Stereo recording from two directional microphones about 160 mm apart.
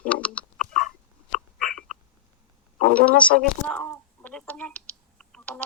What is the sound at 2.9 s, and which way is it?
Speech, 5° left (ahead or behind).